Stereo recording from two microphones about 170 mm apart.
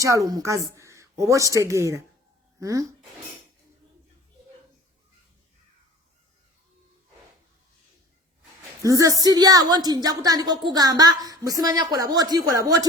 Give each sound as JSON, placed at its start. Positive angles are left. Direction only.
{"t": 0.0, "sound": "a woman's voice", "side_deg": -20}
{"t": 8.8, "sound": "a woman's voice", "side_deg": -20}